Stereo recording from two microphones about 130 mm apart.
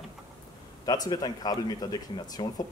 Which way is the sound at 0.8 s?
30° left (ahead or behind).